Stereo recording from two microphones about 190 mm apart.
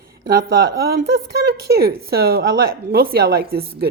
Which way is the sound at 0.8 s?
55° right (ahead or behind).